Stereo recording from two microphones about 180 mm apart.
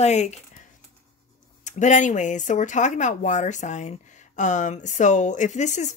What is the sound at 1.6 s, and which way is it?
Speech, 40° left (ahead or behind).